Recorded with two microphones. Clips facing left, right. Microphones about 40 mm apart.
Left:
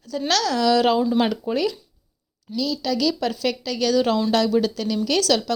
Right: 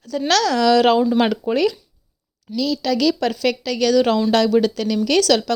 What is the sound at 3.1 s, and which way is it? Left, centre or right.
Speech, right.